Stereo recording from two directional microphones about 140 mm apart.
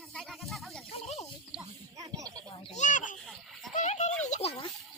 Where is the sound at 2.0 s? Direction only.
25° right (ahead or behind).